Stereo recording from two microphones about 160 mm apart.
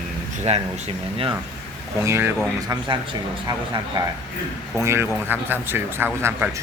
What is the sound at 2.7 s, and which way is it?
A man's voice, 30° right (ahead or behind).